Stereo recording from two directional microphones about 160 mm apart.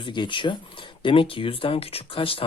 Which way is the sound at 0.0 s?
30° left (ahead or behind).